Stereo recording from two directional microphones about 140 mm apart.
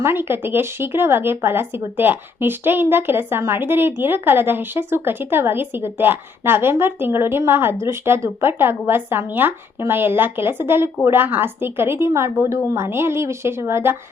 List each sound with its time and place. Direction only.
0.0 s speech: 15° right (ahead or behind)